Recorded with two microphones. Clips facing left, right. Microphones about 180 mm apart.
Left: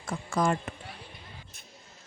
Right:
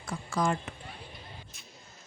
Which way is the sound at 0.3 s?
50° left (ahead or behind).